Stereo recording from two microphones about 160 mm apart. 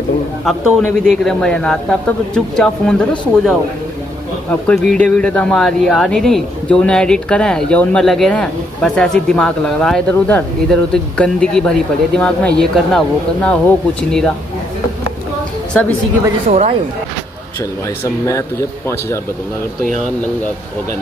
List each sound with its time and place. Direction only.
0.5 s speech: centre (ahead or behind)
16.4 s speech: 45° right (ahead or behind)
18.0 s speech: 20° left (ahead or behind)